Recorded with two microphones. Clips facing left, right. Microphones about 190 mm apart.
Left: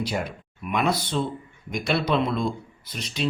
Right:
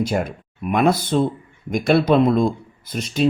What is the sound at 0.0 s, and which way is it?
Speech, 50° right (ahead or behind).